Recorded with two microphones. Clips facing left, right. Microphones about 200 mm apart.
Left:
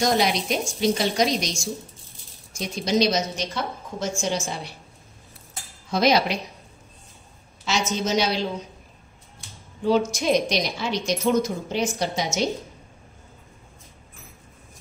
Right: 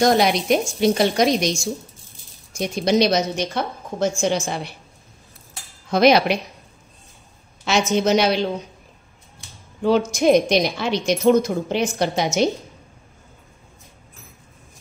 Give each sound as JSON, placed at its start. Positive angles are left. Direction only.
{"t": 0.0, "sound": "a woman's voice", "side_deg": -55}
{"t": 2.6, "sound": "a woman's voice", "side_deg": -60}
{"t": 5.9, "sound": "a woman's voice", "side_deg": -60}
{"t": 7.6, "sound": "a woman's voice", "side_deg": -60}
{"t": 9.8, "sound": "a woman's voice", "side_deg": -60}